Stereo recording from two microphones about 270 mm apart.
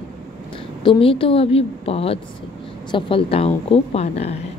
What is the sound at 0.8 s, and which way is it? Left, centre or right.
Speech, centre.